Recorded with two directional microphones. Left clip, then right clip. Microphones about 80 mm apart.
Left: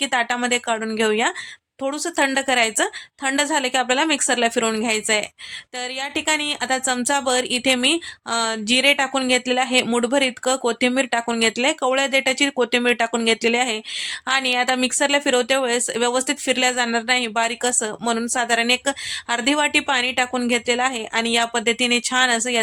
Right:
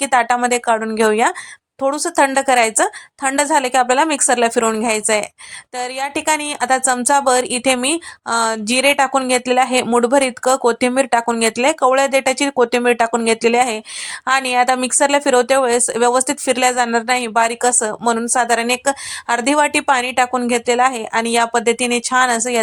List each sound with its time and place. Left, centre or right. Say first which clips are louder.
0.0 s a woman's voice: right 6 dB; right